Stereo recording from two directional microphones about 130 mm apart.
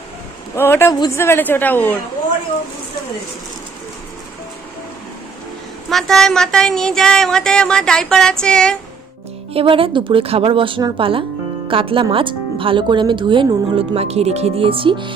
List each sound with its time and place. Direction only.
0.5 s a woman's voice: 20° left (ahead or behind)
5.9 s speech: centre (ahead or behind)
9.5 s speech: 45° right (ahead or behind)